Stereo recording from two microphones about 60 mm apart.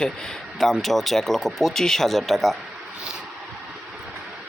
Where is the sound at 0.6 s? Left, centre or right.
Centre.